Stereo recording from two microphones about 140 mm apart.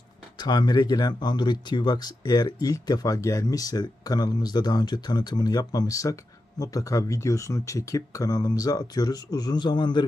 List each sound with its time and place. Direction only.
0.3 s speech: 30° left (ahead or behind)